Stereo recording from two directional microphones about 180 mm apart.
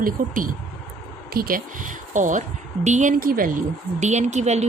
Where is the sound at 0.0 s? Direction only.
50° right (ahead or behind).